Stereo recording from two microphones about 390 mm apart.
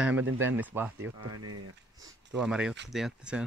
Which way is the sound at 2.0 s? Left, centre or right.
Centre.